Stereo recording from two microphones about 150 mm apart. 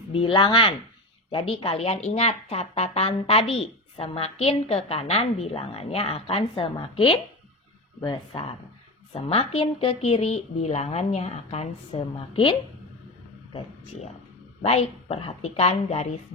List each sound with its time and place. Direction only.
0.1 s a woman's voice: 35° left (ahead or behind)